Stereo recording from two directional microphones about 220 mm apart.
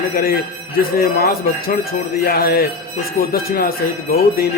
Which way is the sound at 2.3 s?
45° left (ahead or behind).